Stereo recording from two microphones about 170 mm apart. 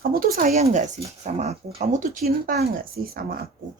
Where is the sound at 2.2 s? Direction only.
60° right (ahead or behind).